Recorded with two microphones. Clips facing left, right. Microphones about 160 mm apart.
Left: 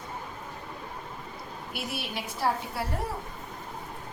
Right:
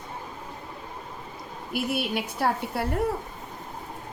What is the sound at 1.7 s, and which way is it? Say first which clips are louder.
A woman's voice: right 9 dB; 55° right (ahead or behind).